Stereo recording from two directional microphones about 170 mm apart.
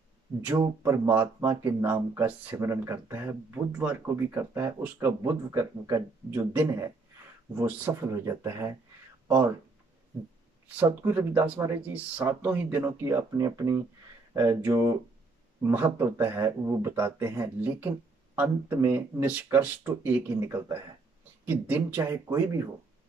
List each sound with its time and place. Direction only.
0.4 s speech: 10° right (ahead or behind)
10.8 s speech: 10° right (ahead or behind)